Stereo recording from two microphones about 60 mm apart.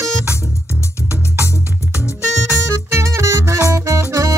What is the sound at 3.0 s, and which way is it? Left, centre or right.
Music, right.